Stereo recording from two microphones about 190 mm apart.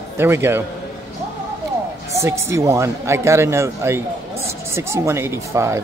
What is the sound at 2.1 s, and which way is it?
Speech, 15° right (ahead or behind).